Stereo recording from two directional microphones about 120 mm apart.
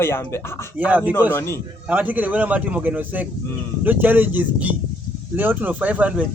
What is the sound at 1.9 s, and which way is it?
Speech, 15° right (ahead or behind).